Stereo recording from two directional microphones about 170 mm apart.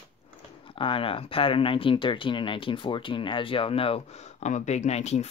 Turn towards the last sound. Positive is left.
turn(degrees=40)  # may be behind; listen again after turning